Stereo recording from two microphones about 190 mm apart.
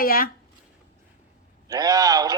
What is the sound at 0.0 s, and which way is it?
Speech, 50° left (ahead or behind).